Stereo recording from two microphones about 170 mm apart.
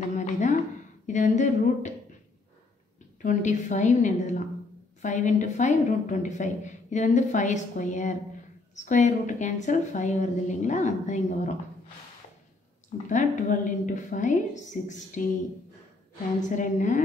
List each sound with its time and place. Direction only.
0.2 s a sound: 45° left (ahead or behind)
1.0 s a woman's voice: 45° left (ahead or behind)
3.2 s a woman's voice: 50° left (ahead or behind)
13.1 s a woman's voice: 50° left (ahead or behind)
16.3 s a woman's voice: 45° left (ahead or behind)